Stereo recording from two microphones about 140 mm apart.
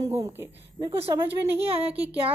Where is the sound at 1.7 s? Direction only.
45° right (ahead or behind).